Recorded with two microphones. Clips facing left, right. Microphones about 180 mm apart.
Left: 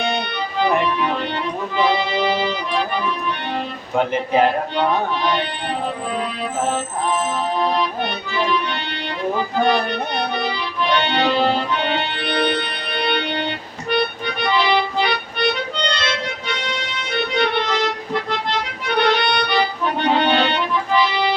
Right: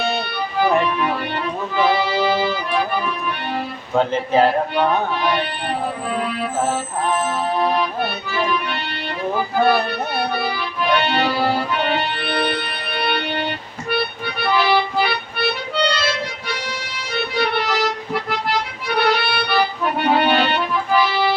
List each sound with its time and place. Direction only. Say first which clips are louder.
1.7 s music: right 1 dB; 20° left (ahead or behind)
3.9 s speech: right 1 dB; 15° left (ahead or behind)
9.6 s accordion: right 2 dB; 5° right (ahead or behind)
14.5 s music: right 1 dB; 5° right (ahead or behind)
17.4 s music: right 1 dB; 10° right (ahead or behind)